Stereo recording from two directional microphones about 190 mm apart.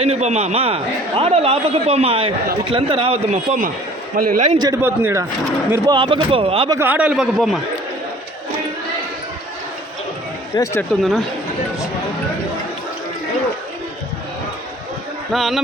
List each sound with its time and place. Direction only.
0.0 s a man's voice: 35° right (ahead or behind)
3.3 s a man's voice: 40° right (ahead or behind)
4.6 s a man's voice: 15° right (ahead or behind)
5.7 s speech: 25° right (ahead or behind)
6.7 s a man's voice: 10° right (ahead or behind)
10.5 s speech: 15° left (ahead or behind)
15.3 s a man's voice: centre (ahead or behind)